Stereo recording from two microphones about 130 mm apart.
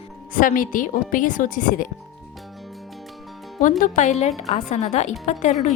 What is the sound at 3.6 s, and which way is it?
A woman's voice, 85° left.